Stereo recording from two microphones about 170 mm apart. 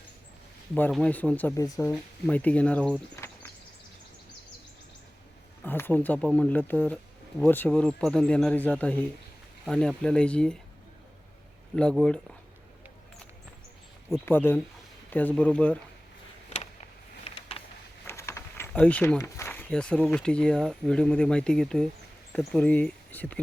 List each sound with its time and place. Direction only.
0.7 s speech: 5° left (ahead or behind); by 1.9 s 20° left (ahead or behind)
2.2 s speech: 10° left (ahead or behind)
5.6 s speech: 10° left (ahead or behind)
11.8 s speech: 5° left (ahead or behind)
14.1 s speech: 10° left (ahead or behind)
17.2 s a sound: 35° left (ahead or behind)
18.0 s speech: 15° left (ahead or behind)